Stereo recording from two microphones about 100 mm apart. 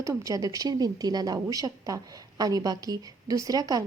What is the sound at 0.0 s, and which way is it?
Speech, 30° right (ahead or behind).